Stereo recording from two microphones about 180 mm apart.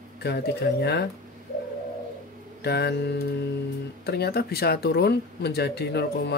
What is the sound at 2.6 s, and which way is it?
Speech, 65° left (ahead or behind).